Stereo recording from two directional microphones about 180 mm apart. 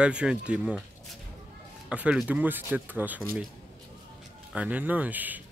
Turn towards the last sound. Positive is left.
turn(degrees=-10)  # may be behind; listen again after turning